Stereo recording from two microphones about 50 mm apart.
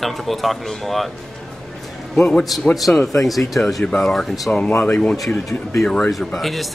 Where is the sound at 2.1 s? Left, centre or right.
Centre.